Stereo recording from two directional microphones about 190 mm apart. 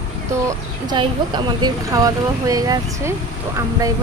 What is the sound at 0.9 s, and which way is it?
A woman's voice, 25° right (ahead or behind).